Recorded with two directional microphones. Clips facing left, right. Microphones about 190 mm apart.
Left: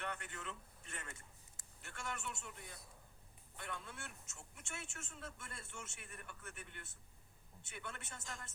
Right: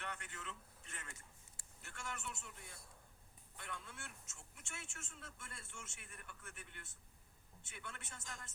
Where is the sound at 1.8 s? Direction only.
60° left (ahead or behind).